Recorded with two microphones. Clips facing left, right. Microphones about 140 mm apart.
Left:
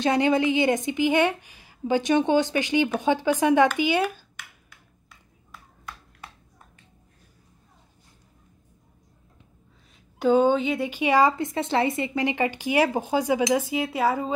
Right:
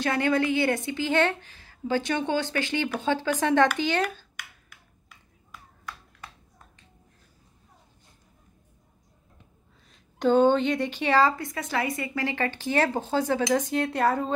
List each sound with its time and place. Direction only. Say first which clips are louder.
0.0 s speech: left 3 dB; 20° left (ahead or behind)
10.1 s speech: even; 5° left (ahead or behind)